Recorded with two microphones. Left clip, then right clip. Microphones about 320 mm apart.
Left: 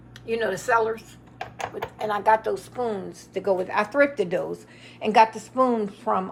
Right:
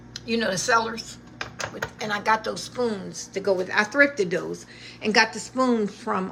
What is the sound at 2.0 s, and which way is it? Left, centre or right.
A woman's voice, centre.